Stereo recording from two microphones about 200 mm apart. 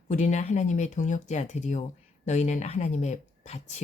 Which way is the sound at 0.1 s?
35° left (ahead or behind).